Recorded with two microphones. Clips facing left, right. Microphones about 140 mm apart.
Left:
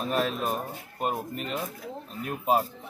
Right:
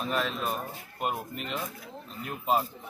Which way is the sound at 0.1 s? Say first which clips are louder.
Left 4 dB; 40° left (ahead or behind).